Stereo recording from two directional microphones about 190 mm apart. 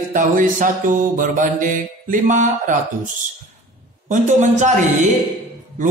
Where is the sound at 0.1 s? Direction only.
45° right (ahead or behind).